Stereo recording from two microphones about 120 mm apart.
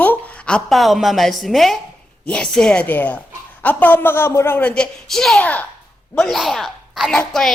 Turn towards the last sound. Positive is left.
turn(degrees=5)  # may be behind; listen again after turning